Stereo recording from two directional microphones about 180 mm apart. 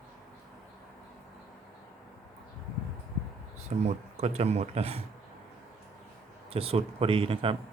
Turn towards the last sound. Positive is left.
turn(degrees=-30)  # may be behind; listen again after turning